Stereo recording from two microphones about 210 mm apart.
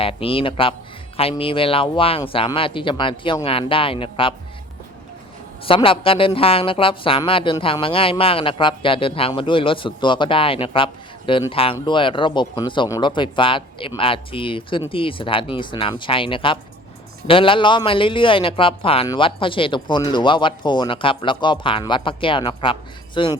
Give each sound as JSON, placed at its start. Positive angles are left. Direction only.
{"t": 0.0, "sound": "speech", "side_deg": 25}
{"t": 5.6, "sound": "speech", "side_deg": 25}